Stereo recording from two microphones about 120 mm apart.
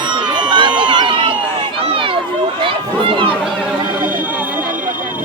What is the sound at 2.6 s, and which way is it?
Run, 45° right (ahead or behind).